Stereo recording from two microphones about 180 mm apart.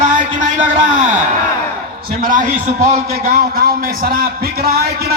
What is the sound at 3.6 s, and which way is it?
Speech, 55° right (ahead or behind).